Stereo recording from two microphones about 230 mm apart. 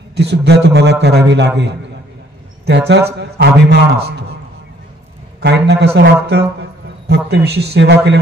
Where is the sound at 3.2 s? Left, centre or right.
Right.